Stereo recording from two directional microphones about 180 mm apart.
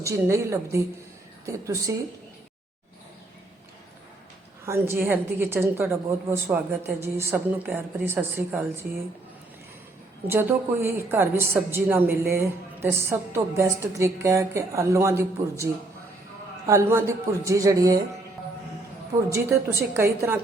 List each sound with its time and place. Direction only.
0.0 s a woman's voice: 15° right (ahead or behind)
4.6 s a woman's voice: 15° right (ahead or behind)
10.2 s a woman's voice: 10° right (ahead or behind)
16.6 s a woman's voice: 15° right (ahead or behind)
19.1 s a woman's voice: 20° right (ahead or behind)
19.9 s a woman's voice: 10° right (ahead or behind)